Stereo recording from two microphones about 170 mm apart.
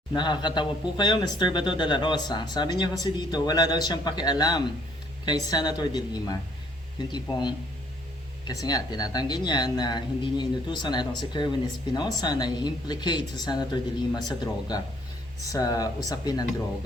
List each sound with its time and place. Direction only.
0.1 s speech: 25° left (ahead or behind)